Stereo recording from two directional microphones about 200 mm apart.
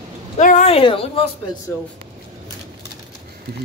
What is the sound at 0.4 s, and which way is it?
Speech, 40° left (ahead or behind).